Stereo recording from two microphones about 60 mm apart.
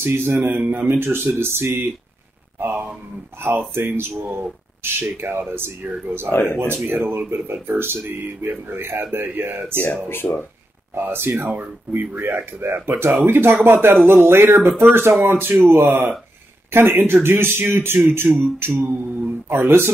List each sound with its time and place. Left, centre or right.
0.0 s speech: right
10.0 s speech: left
11.0 s speech: right